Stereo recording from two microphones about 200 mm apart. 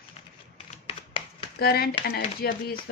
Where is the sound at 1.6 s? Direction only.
50° left (ahead or behind).